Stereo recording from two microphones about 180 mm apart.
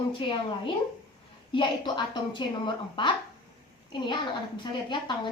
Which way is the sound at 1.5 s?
25° left (ahead or behind).